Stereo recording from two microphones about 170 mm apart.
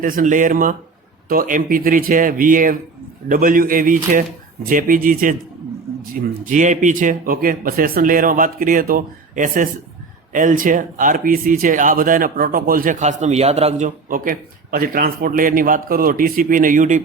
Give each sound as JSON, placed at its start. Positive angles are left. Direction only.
{"t": 0.0, "sound": "speech", "side_deg": -50}
{"t": 6.5, "sound": "speech", "side_deg": -45}